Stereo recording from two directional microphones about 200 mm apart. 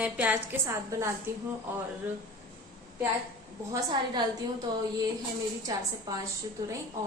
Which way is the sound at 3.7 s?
20° right (ahead or behind).